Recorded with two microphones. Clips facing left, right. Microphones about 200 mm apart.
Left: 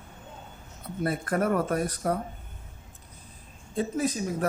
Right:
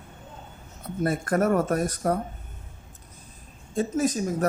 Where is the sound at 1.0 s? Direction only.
45° right (ahead or behind).